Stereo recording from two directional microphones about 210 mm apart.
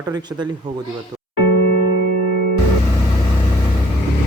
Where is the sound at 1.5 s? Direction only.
50° left (ahead or behind).